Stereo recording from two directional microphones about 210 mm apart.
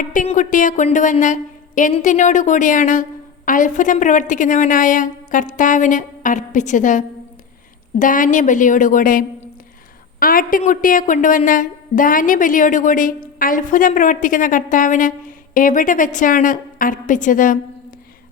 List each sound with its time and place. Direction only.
0.0 s a woman's voice: 40° left (ahead or behind)